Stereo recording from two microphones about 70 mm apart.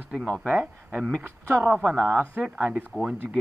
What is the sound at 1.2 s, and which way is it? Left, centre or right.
Speech, right.